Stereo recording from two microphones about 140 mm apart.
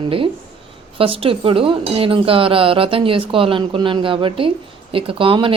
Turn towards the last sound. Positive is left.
turn(degrees=-40)  # may be behind; listen again after turning